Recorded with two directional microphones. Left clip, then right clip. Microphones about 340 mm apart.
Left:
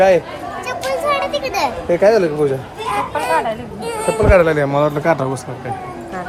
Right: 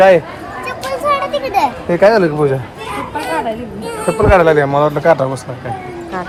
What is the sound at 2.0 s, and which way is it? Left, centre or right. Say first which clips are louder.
Speech: right 3 dB; centre.